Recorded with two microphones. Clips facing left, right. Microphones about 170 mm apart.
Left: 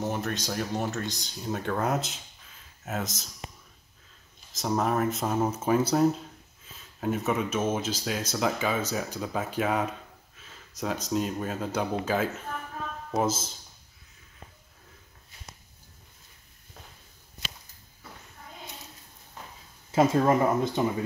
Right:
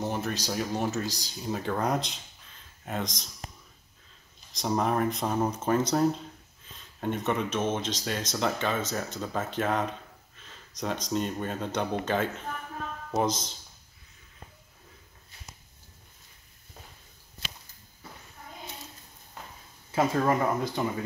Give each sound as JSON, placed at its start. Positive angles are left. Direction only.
{"t": 0.0, "sound": "speech", "side_deg": 0}
{"t": 4.5, "sound": "speech", "side_deg": 0}
{"t": 19.9, "sound": "speech", "side_deg": 20}